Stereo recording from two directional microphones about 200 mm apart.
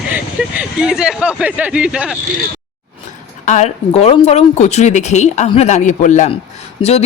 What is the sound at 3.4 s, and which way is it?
Speech, 35° left (ahead or behind).